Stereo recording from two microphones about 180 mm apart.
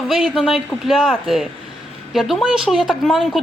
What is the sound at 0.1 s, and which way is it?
Speech, centre (ahead or behind).